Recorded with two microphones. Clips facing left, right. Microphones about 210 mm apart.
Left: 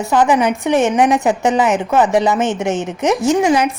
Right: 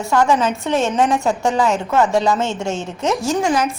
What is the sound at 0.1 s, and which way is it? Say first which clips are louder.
A woman's voice: left 2 dB; 15° left (ahead or behind).